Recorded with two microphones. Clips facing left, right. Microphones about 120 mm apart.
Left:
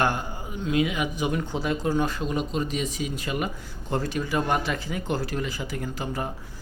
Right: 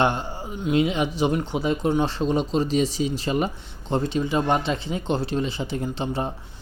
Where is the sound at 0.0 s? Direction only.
25° right (ahead or behind).